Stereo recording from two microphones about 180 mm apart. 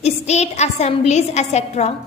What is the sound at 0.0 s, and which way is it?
A woman's voice, 40° left (ahead or behind).